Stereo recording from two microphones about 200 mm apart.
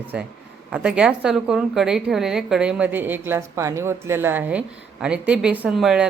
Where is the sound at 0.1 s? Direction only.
5° right (ahead or behind).